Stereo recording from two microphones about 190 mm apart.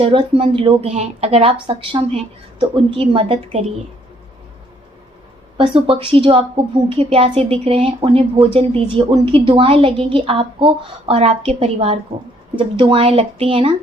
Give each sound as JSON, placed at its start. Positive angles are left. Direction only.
{"t": 0.0, "sound": "speech", "side_deg": -25}
{"t": 5.5, "sound": "speech", "side_deg": -30}